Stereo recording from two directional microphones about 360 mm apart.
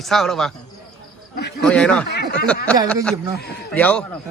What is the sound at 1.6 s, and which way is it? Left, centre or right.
Speech, centre.